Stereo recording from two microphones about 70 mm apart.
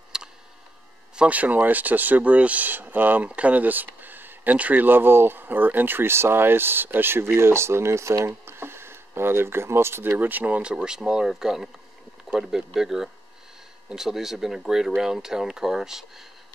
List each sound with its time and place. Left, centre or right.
0.1 s tick: centre
1.1 s speech: centre